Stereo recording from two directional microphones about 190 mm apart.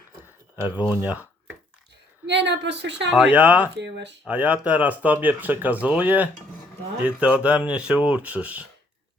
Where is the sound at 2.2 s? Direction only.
65° right (ahead or behind).